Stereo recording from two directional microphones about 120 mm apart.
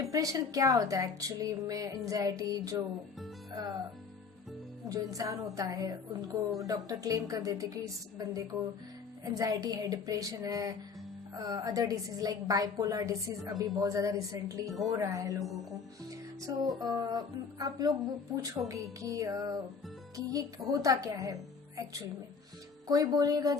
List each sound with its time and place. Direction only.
0.1 s a woman's voice: 30° right (ahead or behind)
2.4 s music: 30° right (ahead or behind)
3.5 s speech: 35° right (ahead or behind)
4.9 s a woman's voice: 30° right (ahead or behind)
9.3 s a woman's voice: 30° right (ahead or behind)
16.0 s music: 30° right (ahead or behind)
18.4 s a woman's voice: 25° right (ahead or behind)
22.9 s music: 30° right (ahead or behind)